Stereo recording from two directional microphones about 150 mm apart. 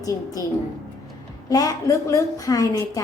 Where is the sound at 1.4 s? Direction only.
25° left (ahead or behind).